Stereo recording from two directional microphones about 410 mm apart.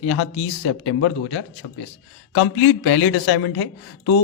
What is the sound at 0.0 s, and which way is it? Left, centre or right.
A man's voice, left.